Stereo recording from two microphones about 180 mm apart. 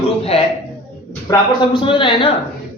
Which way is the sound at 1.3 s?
20° left (ahead or behind).